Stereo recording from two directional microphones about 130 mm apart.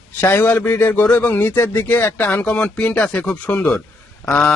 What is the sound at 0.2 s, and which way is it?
A man's voice, 15° left (ahead or behind).